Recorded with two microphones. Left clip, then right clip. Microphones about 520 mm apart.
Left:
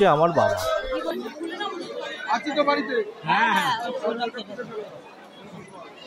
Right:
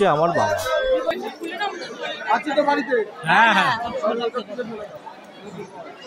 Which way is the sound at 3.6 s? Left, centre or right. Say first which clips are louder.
Right 4 dB; left.